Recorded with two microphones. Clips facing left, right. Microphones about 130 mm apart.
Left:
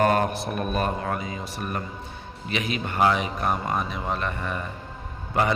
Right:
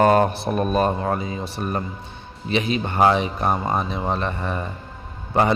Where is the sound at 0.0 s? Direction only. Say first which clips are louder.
Right 5 dB; 30° right (ahead or behind).